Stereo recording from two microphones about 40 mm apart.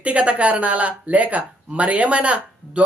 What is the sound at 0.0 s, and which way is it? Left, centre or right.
A woman's voice, right.